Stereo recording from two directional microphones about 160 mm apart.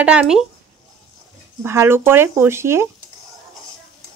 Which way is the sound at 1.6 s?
15° right (ahead or behind).